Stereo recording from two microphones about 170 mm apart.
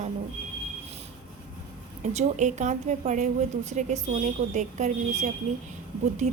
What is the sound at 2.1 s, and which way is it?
A woman's voice, 45° right (ahead or behind).